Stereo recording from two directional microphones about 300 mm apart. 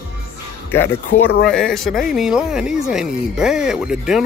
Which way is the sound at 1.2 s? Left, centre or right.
Left.